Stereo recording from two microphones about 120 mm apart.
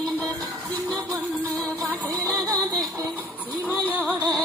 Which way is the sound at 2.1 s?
30° right (ahead or behind).